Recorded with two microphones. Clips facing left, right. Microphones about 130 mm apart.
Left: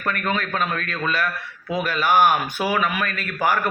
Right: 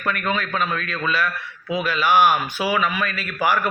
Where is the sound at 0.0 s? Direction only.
45° left (ahead or behind).